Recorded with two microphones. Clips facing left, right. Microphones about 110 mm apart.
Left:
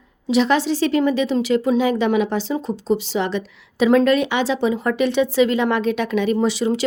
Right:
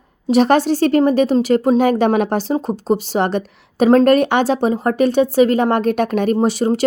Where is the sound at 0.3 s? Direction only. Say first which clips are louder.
Right 4 dB; 50° right (ahead or behind).